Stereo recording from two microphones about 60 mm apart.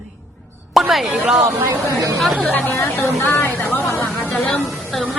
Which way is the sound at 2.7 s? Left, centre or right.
Left.